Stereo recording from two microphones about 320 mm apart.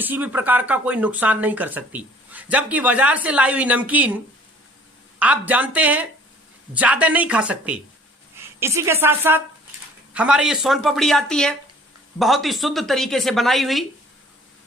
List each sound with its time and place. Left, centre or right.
0.0 s speech: centre
5.2 s a woman's voice: centre